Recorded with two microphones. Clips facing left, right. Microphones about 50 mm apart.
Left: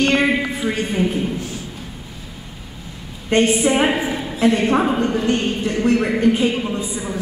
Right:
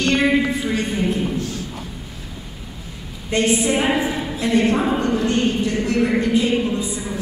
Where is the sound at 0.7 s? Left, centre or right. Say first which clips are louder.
Left 1 dB; centre.